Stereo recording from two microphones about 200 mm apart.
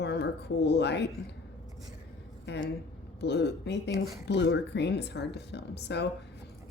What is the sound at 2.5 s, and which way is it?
A woman's voice, 60° left (ahead or behind).